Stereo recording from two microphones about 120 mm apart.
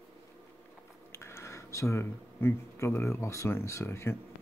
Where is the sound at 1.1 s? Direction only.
20° left (ahead or behind).